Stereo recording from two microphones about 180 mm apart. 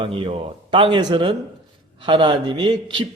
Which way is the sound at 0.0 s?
30° right (ahead or behind).